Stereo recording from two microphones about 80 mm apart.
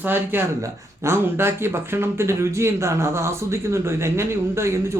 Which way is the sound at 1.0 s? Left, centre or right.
Right.